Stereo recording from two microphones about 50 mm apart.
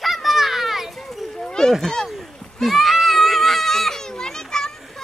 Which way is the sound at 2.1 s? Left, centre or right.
Centre.